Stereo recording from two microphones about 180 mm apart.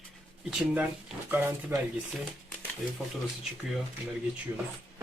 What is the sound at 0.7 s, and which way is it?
Speech, 10° right (ahead or behind).